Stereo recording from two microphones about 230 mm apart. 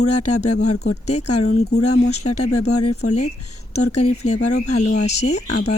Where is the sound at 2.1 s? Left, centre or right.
Left.